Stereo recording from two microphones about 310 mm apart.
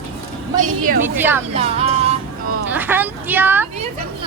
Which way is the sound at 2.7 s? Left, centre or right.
Centre.